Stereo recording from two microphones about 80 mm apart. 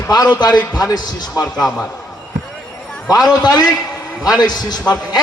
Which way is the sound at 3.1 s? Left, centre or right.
Left.